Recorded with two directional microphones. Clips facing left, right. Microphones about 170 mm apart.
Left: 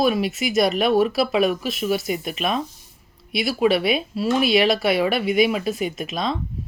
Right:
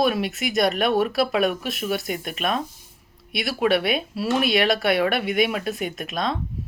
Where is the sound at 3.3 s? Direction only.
Centre (ahead or behind).